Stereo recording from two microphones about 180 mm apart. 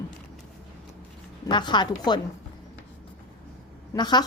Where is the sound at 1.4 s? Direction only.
25° left (ahead or behind).